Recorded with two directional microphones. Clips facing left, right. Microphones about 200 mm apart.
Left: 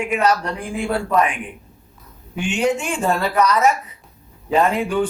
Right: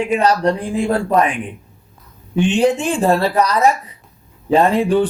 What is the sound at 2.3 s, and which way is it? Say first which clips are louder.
Speech: right 5 dB; 35° right (ahead or behind).